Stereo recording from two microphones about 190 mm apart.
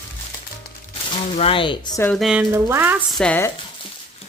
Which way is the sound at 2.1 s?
Centre (ahead or behind).